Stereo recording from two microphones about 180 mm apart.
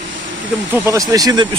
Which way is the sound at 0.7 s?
15° right (ahead or behind).